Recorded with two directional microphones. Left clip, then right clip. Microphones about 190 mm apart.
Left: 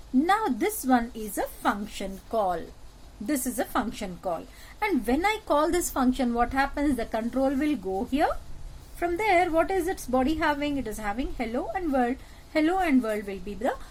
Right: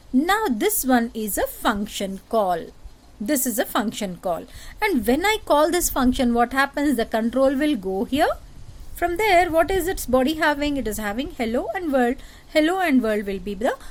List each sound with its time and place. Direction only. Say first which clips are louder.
0.3 s a woman's voice: right 4 dB; 55° right (ahead or behind)